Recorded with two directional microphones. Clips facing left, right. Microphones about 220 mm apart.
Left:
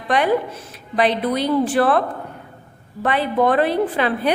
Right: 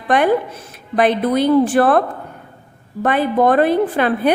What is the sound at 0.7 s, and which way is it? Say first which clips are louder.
A woman's voice: right 3 dB; 50° right (ahead or behind).